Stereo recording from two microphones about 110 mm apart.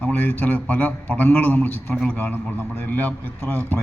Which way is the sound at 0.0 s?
20° left (ahead or behind).